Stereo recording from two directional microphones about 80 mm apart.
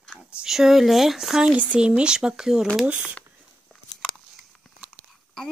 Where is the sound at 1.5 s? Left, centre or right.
Centre.